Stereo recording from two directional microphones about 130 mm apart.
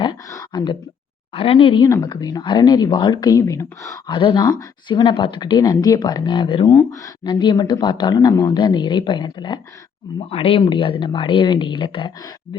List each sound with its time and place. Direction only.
0.3 s a sound: 30° left (ahead or behind)
1.3 s speech: 45° left (ahead or behind)
1.8 s speech: 25° left (ahead or behind)
4.1 s speech: 40° left (ahead or behind)
10.2 s speech: 45° left (ahead or behind)